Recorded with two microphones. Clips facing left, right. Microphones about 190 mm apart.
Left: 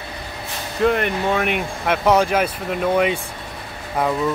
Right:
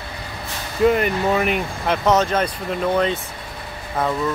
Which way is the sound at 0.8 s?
5° right (ahead or behind).